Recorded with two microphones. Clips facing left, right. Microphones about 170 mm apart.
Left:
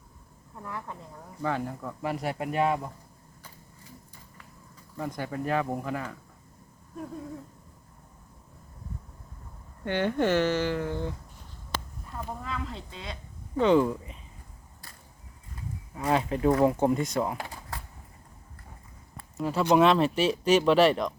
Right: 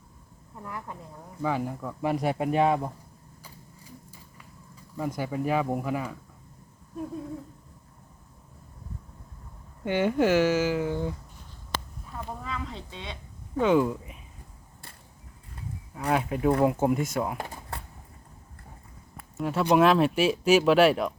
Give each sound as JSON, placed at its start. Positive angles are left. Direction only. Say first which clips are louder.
{"t": 0.6, "sound": "speech", "louder": "even", "side_deg": -10}
{"t": 2.0, "sound": "speech", "louder": "right 5 dB", "side_deg": -20}
{"t": 4.9, "sound": "speech", "louder": "right 3 dB", "side_deg": -5}
{"t": 9.8, "sound": "speech", "louder": "right 2 dB", "side_deg": -10}
{"t": 12.0, "sound": "a sound", "louder": "even", "side_deg": 0}
{"t": 13.6, "sound": "speech", "louder": "left 1 dB", "side_deg": -5}
{"t": 16.0, "sound": "speech", "louder": "even", "side_deg": -5}
{"t": 19.4, "sound": "speech", "louder": "even", "side_deg": 0}